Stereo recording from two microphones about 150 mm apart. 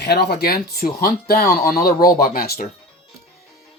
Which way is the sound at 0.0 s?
90° left.